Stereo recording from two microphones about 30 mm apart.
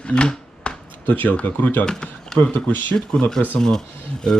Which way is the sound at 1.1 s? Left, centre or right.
Left.